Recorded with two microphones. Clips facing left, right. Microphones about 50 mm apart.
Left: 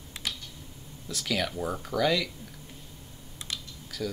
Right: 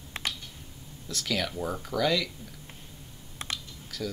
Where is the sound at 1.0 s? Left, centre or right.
Centre.